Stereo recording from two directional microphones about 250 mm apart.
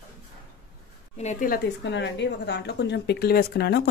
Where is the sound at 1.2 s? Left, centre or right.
Left.